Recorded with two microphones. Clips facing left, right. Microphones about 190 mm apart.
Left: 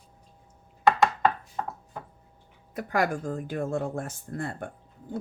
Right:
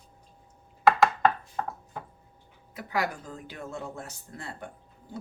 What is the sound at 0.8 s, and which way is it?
Chopping, centre (ahead or behind).